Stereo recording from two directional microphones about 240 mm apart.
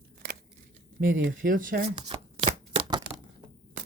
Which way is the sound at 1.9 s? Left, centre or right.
Centre.